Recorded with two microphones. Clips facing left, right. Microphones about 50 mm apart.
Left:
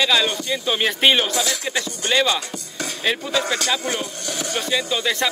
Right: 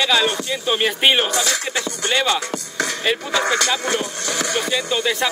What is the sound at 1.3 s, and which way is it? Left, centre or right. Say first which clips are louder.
Speech: right 2 dB; right.